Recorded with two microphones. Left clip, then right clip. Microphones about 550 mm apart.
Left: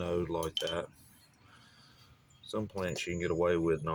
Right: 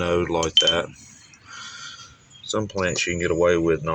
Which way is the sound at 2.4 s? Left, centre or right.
Left.